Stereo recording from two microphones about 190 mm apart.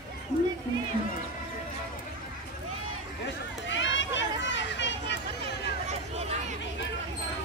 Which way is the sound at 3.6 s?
75° left (ahead or behind).